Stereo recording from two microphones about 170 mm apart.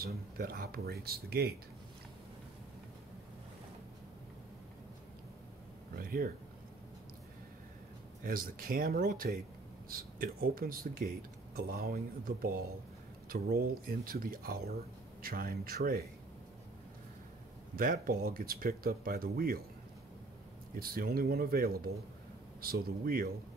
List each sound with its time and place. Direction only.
0.0 s speech: 60° right (ahead or behind)
5.9 s speech: 60° right (ahead or behind)
8.2 s speech: 55° right (ahead or behind)
17.7 s speech: 55° right (ahead or behind)
20.8 s speech: 60° right (ahead or behind)